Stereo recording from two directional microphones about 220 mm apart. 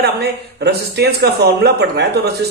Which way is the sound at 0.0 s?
50° right (ahead or behind).